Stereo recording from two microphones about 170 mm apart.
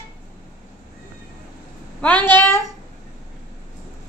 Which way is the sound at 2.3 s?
15° left (ahead or behind).